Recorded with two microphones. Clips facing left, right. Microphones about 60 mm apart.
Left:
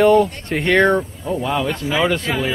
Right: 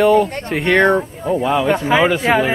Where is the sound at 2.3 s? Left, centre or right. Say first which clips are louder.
Right 8 dB; right.